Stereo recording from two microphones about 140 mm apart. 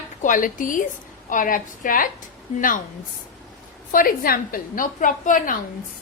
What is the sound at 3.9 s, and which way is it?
A woman's voice, 90° left.